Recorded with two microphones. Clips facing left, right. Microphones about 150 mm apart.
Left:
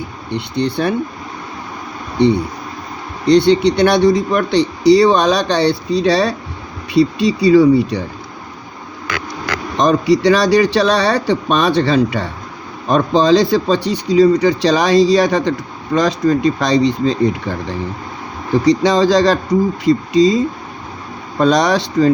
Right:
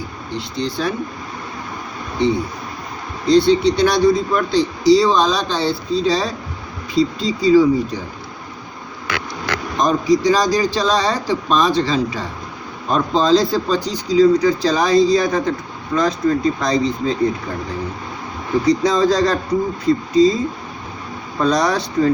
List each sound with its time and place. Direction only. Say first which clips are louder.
0.3 s speech: left 5 dB; 65° left (ahead or behind)
2.1 s speech: left 5 dB; 65° left (ahead or behind)
9.7 s speech: left 3 dB; 75° left (ahead or behind)
18.7 s speech: left 3 dB; 90° left